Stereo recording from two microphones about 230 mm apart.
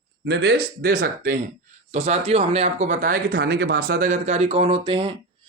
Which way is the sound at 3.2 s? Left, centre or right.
Right.